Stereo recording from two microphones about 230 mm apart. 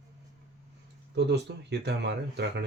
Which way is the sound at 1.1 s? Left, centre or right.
Right.